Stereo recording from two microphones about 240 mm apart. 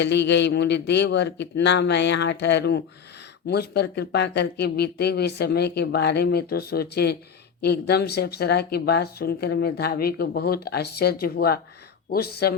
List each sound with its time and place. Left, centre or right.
0.0 s speech: left